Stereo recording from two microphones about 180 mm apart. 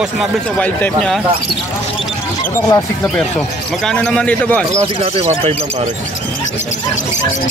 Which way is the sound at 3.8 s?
5° left (ahead or behind).